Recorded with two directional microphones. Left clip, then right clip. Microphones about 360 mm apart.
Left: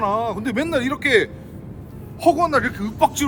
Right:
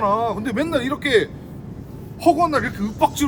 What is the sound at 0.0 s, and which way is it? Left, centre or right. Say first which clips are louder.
Speech: right 1 dB; centre.